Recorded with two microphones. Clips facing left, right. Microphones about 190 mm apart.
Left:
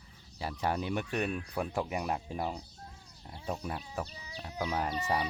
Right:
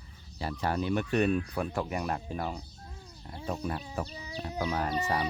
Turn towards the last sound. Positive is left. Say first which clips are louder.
# right 2 dB
turn(degrees=15)  # may be behind; listen again after turning